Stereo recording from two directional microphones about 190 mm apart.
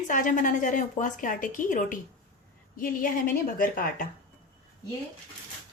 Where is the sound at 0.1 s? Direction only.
45° left (ahead or behind).